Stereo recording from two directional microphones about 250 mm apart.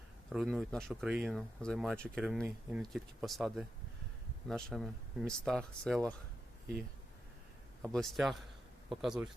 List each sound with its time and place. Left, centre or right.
0.3 s speech: centre
7.8 s speech: centre